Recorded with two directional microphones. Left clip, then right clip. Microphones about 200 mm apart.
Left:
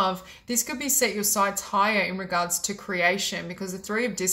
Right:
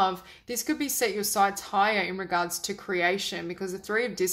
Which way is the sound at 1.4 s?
40° right (ahead or behind).